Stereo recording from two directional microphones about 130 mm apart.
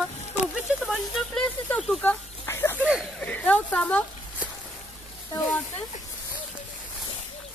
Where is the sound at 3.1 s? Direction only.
10° left (ahead or behind).